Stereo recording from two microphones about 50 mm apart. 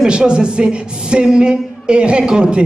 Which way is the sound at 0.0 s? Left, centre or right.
Centre.